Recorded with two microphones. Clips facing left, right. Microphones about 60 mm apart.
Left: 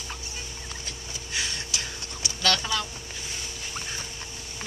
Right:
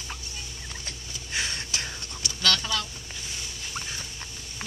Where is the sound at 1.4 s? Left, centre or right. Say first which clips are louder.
Right 1 dB; right.